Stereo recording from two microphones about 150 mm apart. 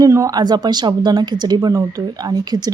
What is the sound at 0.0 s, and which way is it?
Speech, 25° right (ahead or behind).